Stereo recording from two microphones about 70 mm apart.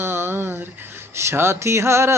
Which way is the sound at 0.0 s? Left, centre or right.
Right.